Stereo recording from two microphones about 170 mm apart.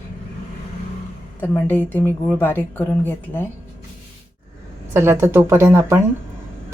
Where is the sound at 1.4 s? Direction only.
10° left (ahead or behind).